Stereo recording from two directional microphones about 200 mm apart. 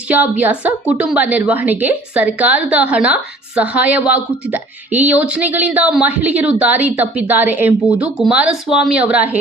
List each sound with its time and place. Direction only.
0.1 s a woman's voice: 10° right (ahead or behind)